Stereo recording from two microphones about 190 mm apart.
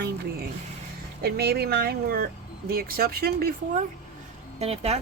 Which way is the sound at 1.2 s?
55° right (ahead or behind).